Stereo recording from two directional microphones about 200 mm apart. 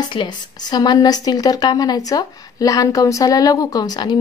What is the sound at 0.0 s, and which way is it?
A woman's voice, 25° left (ahead or behind).